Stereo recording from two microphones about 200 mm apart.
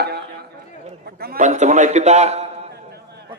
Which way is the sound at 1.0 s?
50° right (ahead or behind).